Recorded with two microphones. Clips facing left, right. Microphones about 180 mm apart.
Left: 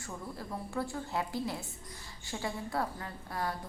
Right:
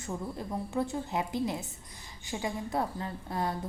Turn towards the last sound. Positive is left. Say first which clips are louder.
# right 4 dB
turn(degrees=-20)  # may be behind; listen again after turning